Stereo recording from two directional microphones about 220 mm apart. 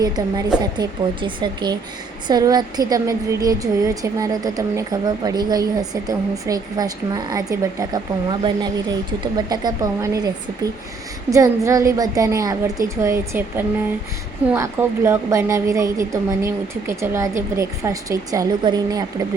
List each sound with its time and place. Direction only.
0.0 s a woman's voice: 20° right (ahead or behind)